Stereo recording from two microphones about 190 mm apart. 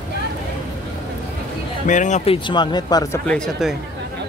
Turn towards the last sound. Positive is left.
turn(degrees=0)  # may be behind; listen again after turning